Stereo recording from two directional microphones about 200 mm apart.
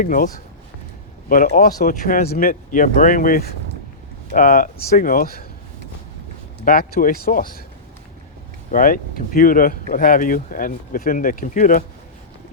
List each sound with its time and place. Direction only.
0.0 s speech: 40° left (ahead or behind)
1.3 s speech: 45° left (ahead or behind)
6.7 s speech: 45° left (ahead or behind)
8.7 s speech: 45° left (ahead or behind)